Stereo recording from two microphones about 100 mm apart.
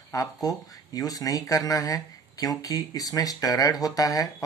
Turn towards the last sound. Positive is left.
turn(degrees=35)  # may be behind; listen again after turning